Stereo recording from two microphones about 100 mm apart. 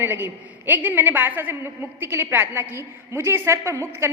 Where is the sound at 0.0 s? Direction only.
20° right (ahead or behind).